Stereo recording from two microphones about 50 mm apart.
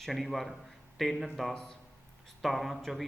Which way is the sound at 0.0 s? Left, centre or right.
Centre.